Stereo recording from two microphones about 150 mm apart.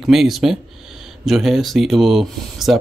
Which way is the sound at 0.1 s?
Centre (ahead or behind).